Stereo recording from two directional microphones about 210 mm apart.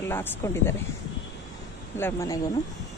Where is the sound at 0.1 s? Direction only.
10° left (ahead or behind).